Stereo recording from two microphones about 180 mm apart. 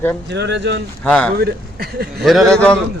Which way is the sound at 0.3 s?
75° right (ahead or behind).